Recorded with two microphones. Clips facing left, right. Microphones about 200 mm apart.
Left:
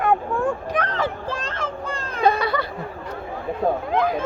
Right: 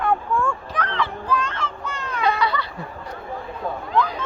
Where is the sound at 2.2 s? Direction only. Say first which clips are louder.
Left 3 dB; 50° left (ahead or behind).